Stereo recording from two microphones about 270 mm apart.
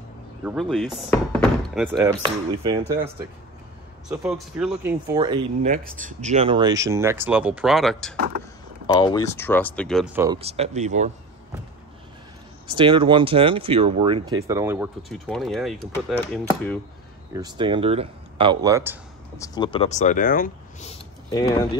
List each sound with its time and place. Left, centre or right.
0.4 s speech: centre
1.9 s speech: centre
4.1 s speech: centre
5.7 s speech: right; by 8.1 s centre
8.8 s speech: centre
10.4 s speech: right
12.7 s speech: centre
17.3 s speech: centre
19.3 s speech: centre; by 20.9 s left
21.3 s speech: centre